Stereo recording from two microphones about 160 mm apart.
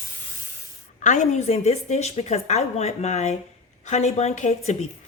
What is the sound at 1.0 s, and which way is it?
A woman's voice, 50° left (ahead or behind).